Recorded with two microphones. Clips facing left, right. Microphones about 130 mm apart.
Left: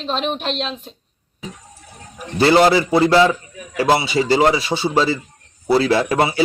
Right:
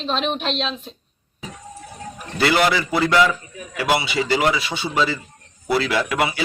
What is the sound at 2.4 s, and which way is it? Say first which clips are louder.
Speech: left 6 dB; 30° left (ahead or behind).